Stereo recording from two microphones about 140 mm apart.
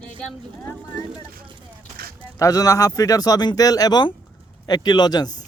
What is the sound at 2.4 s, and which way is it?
Speech, 25° left (ahead or behind).